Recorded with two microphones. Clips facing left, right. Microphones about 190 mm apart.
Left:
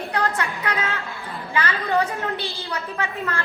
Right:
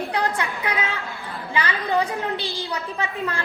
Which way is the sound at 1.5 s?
15° right (ahead or behind).